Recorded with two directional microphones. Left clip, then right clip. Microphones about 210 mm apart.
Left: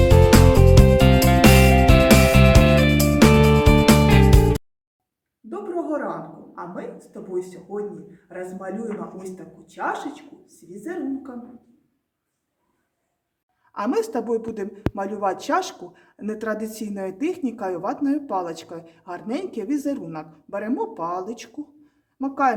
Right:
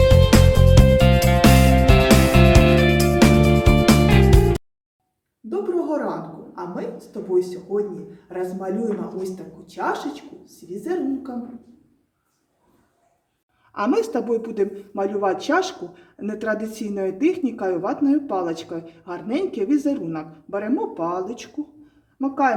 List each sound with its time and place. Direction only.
0.0 s music: centre (ahead or behind)
5.5 s a sound: centre (ahead or behind)
6.6 s a woman's voice: centre (ahead or behind)
13.8 s a woman's voice: 25° left (ahead or behind)